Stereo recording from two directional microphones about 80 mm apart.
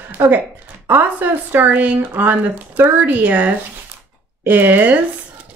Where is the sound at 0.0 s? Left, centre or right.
Right.